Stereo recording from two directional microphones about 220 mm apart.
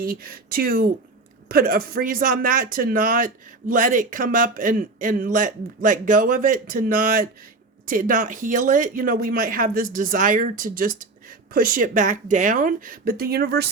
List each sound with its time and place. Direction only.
0.0 s speech: 40° right (ahead or behind)